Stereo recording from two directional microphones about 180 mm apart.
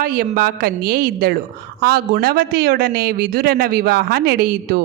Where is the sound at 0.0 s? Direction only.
55° right (ahead or behind).